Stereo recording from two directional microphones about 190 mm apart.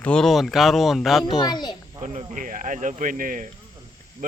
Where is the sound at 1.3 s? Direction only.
20° left (ahead or behind).